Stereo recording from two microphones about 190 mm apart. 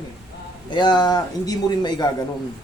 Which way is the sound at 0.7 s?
25° left (ahead or behind).